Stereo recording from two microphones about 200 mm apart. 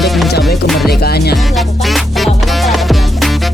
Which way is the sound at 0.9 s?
50° left (ahead or behind).